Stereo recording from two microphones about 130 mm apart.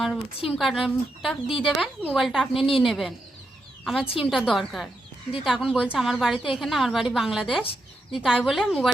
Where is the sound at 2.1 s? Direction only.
Centre (ahead or behind).